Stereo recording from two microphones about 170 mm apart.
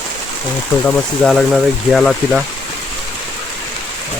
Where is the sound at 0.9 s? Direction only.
Centre (ahead or behind).